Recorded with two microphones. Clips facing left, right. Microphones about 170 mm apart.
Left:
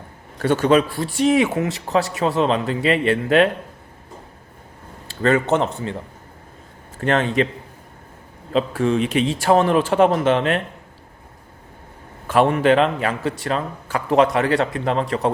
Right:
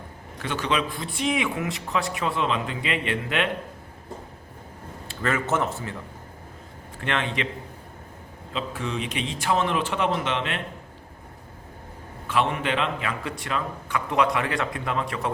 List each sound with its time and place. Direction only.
0.3 s a man's voice: 45° left (ahead or behind)
5.2 s a man's voice: 30° left (ahead or behind)
7.0 s a man's voice: 40° left (ahead or behind)
8.5 s a man's voice: 45° left (ahead or behind)
12.3 s a man's voice: 45° left (ahead or behind)